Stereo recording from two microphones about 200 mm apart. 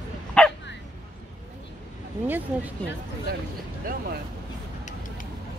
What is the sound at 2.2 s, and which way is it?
Speech, 10° right (ahead or behind).